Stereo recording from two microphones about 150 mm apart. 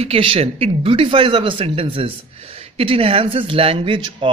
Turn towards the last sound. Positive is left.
turn(degrees=-35)  # may be behind; listen again after turning